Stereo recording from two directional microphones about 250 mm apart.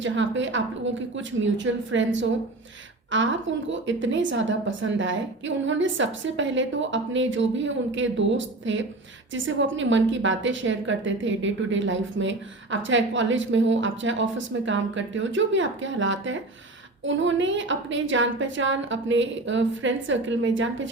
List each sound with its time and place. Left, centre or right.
0.0 s a woman's voice: right